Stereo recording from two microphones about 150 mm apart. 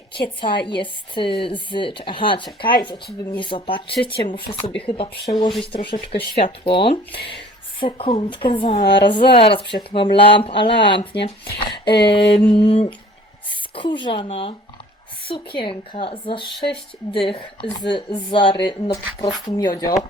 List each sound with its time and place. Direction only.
0.4 s speech: 35° left (ahead or behind)